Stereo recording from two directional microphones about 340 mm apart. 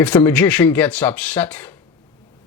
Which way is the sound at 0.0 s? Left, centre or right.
Centre.